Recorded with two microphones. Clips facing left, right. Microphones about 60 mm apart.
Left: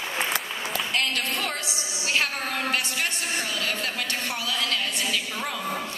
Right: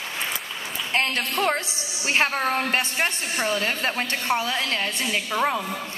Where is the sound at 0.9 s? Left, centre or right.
Right.